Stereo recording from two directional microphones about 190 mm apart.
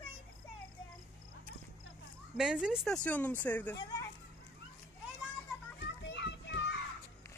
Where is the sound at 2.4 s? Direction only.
5° right (ahead or behind).